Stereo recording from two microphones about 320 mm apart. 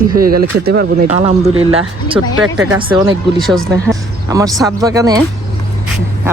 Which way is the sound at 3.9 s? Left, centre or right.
Centre.